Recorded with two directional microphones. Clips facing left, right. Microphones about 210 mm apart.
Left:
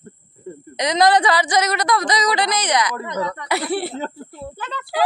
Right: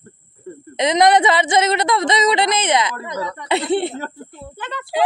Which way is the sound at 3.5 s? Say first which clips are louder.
Right 7 dB; 25° right (ahead or behind).